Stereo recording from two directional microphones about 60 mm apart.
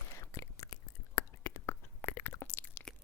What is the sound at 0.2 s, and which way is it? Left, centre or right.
Whispering, left.